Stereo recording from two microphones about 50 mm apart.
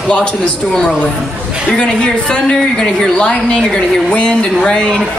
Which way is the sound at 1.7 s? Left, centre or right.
Centre.